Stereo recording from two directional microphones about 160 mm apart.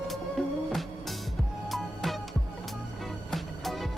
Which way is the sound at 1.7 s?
Centre (ahead or behind).